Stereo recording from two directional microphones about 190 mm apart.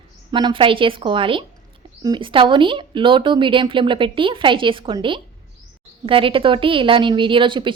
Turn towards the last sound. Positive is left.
turn(degrees=-25)  # may be behind; listen again after turning